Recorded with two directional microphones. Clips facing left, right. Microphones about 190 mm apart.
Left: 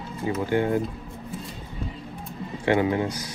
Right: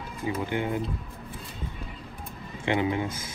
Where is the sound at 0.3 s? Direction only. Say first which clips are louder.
Left 5 dB; 20° right (ahead or behind).